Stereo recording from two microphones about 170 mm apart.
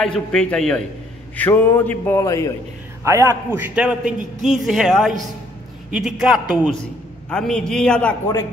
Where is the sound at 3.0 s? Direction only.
20° right (ahead or behind).